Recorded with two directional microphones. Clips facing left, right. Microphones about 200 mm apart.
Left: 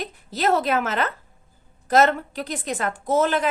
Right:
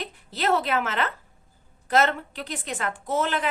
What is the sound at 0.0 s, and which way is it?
A woman's voice, 40° left (ahead or behind).